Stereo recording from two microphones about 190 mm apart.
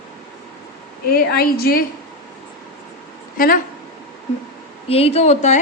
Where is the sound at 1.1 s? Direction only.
50° left (ahead or behind).